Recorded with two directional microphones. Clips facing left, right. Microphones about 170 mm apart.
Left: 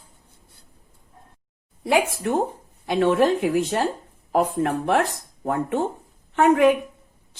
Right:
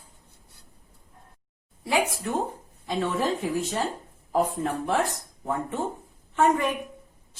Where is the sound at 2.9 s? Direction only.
75° left (ahead or behind).